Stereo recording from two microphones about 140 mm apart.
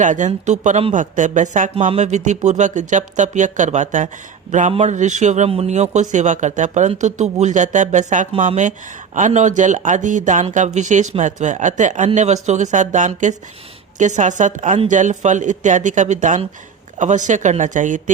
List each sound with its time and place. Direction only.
0.0 s speech: 65° right (ahead or behind)